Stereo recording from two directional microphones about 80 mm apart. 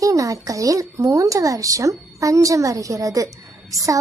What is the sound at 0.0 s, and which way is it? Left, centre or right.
Speech, right.